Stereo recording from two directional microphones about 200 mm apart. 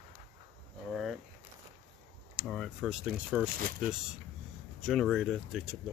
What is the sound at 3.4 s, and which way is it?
Speech, 45° right (ahead or behind).